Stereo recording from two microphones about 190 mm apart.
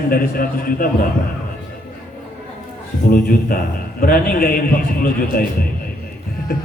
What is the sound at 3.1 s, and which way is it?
A man's voice, 50° left (ahead or behind).